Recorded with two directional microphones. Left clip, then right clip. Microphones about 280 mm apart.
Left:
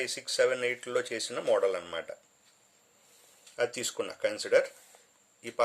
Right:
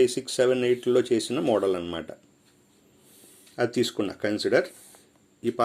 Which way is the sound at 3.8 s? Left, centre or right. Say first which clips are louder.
Right 5 dB; centre.